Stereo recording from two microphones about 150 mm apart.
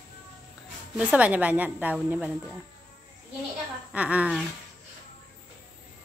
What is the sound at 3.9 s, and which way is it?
Speech, 10° right (ahead or behind).